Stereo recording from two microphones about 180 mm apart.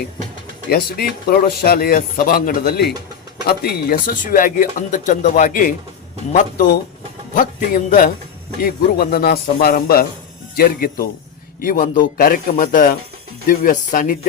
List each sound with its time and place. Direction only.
0.7 s speech: 60° left (ahead or behind)